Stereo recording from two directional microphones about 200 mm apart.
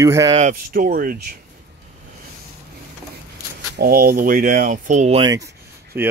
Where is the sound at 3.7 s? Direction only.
50° right (ahead or behind).